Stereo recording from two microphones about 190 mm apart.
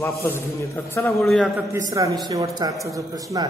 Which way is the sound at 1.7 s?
15° right (ahead or behind).